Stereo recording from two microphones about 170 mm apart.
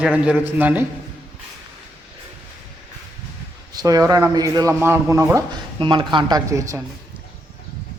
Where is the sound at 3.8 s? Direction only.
20° right (ahead or behind).